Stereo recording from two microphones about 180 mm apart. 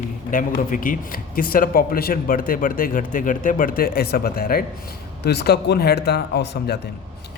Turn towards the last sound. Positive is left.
turn(degrees=70)  # may be behind; listen again after turning